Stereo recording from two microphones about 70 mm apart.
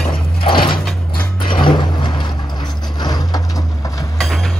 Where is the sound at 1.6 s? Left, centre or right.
Left.